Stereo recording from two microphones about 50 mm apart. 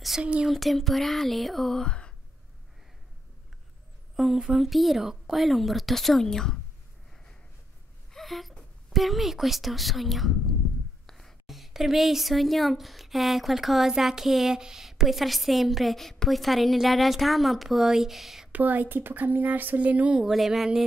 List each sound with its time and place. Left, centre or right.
0.2 s speech: right
0.5 s speech: centre
1.9 s sigh: centre
4.2 s a sound: centre
4.6 s speech: centre
8.1 s speech: centre
18.5 s speech: right
20.2 s a sound: centre